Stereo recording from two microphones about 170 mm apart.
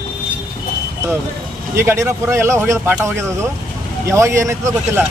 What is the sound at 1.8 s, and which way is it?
Speech, 15° right (ahead or behind).